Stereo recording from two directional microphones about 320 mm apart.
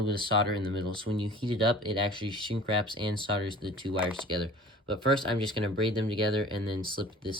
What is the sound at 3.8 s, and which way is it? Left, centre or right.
Speech, centre.